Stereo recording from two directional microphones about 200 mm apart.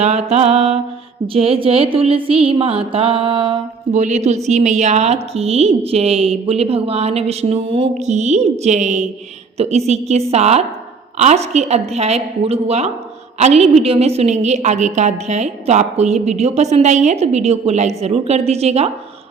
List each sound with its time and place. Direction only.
0.0 s a woman's voice: 30° right (ahead or behind)
1.3 s a sound: 30° right (ahead or behind)
3.9 s a woman's voice: 35° right (ahead or behind)